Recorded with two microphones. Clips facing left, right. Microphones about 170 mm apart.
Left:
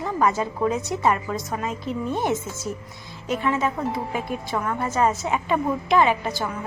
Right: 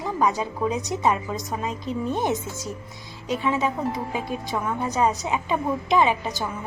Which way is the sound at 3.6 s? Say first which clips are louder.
Even; 20° right (ahead or behind).